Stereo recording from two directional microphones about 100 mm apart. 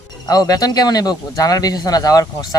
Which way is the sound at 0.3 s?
40° left (ahead or behind).